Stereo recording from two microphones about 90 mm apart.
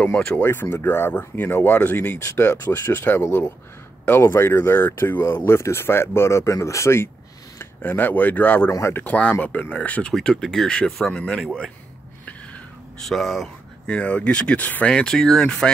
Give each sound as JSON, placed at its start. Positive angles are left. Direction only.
{"t": 0.0, "sound": "speech", "side_deg": 15}
{"t": 7.8, "sound": "speech", "side_deg": 20}
{"t": 8.7, "sound": "speech", "side_deg": 30}
{"t": 9.0, "sound": "speech", "side_deg": 15}
{"t": 13.0, "sound": "speech", "side_deg": 0}
{"t": 13.8, "sound": "speech", "side_deg": 15}